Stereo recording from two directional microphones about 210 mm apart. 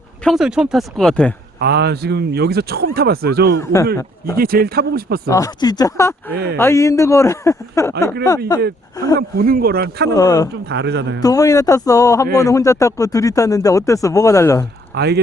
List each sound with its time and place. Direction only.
0.3 s speech: centre (ahead or behind)
1.5 s speech: 50° right (ahead or behind)
3.6 s speech: 15° left (ahead or behind)
4.4 s speech: 45° right (ahead or behind)
5.3 s speech: 15° left (ahead or behind)
6.3 s speech: 50° right (ahead or behind)
6.6 s speech: 10° left (ahead or behind)
9.1 s speech: 45° right (ahead or behind)
10.1 s speech: 15° left (ahead or behind)
10.7 s speech: 55° right (ahead or behind)
11.2 s speech: 15° left (ahead or behind)
14.9 s speech: 50° right (ahead or behind)